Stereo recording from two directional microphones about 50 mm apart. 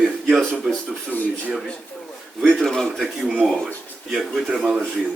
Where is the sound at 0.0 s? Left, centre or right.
Centre.